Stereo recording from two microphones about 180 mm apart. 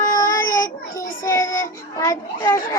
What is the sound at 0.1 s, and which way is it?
Child singing, 20° left (ahead or behind).